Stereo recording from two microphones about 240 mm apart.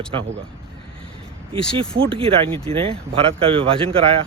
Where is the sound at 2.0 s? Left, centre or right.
Right.